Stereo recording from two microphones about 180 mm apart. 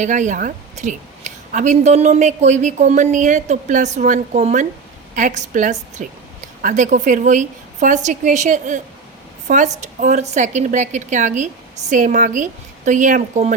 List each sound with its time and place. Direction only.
0.0 s a woman's voice: 40° right (ahead or behind)